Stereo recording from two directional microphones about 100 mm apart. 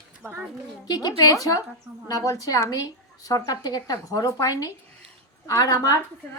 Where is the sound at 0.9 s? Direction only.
40° left (ahead or behind).